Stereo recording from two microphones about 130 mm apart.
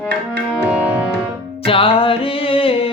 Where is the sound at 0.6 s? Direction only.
10° right (ahead or behind).